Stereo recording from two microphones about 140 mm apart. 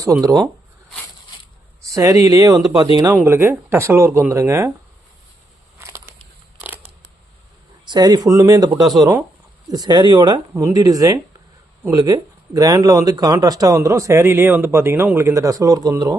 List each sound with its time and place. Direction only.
0.0 s speech: 25° right (ahead or behind)
1.8 s speech: 25° right (ahead or behind)
6.6 s scissors: 10° right (ahead or behind)
7.9 s speech: 30° right (ahead or behind)